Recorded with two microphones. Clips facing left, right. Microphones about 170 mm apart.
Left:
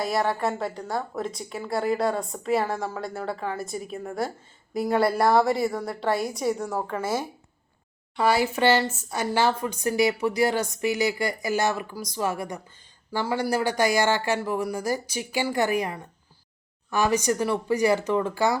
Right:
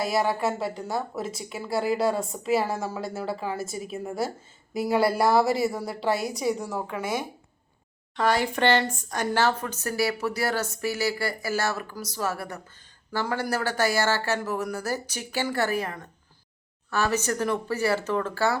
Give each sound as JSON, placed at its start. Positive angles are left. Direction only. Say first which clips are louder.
{"t": 0.0, "sound": "speech", "louder": "even", "side_deg": 0}
{"t": 8.1, "sound": "speech", "louder": "left 2 dB", "side_deg": 10}